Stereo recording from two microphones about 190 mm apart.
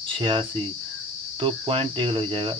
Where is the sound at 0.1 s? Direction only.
25° right (ahead or behind).